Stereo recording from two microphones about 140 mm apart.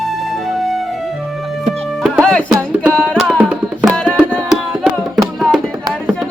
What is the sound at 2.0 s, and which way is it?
Music, centre (ahead or behind).